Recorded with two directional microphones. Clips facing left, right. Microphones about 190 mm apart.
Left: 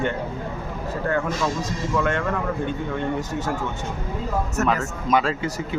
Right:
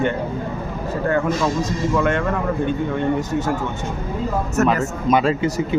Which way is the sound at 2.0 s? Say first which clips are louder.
Right 3 dB; 15° right (ahead or behind).